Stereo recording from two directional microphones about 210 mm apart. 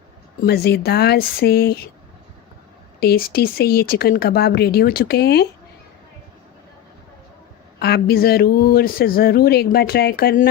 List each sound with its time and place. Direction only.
0.4 s speech: 50° left (ahead or behind)
3.0 s speech: 45° left (ahead or behind)
7.8 s speech: 50° left (ahead or behind)